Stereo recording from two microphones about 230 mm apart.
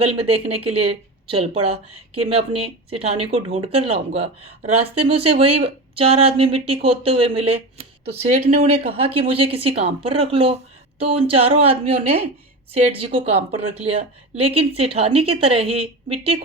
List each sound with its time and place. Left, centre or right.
0.0 s speech: right